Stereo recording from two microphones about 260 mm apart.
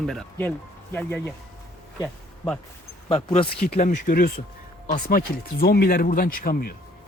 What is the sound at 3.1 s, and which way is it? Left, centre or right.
Speech, left.